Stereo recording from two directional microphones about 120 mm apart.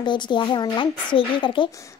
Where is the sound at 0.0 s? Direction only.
40° left (ahead or behind).